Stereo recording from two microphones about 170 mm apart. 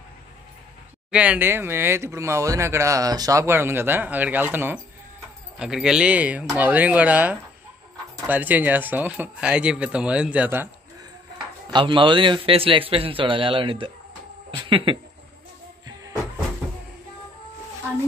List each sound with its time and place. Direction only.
1.1 s speech: 5° right (ahead or behind)
11.7 s a man's voice: 30° right (ahead or behind)